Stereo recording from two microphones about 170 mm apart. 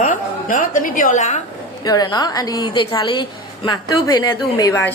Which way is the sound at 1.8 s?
25° left (ahead or behind).